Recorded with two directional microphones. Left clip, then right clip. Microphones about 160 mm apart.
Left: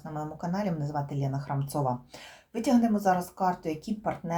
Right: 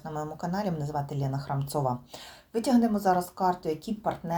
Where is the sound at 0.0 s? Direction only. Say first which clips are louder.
Right 2 dB; 25° right (ahead or behind).